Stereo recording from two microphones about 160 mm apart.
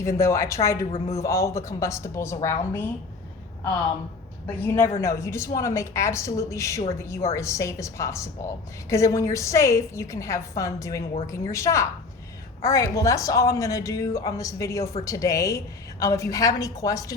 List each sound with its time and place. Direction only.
0.0 s speech: 20° left (ahead or behind)
0.9 s a woman's voice: 35° left (ahead or behind)
1.1 s a woman's voice: 20° left (ahead or behind)
4.4 s a woman's voice: 15° left (ahead or behind)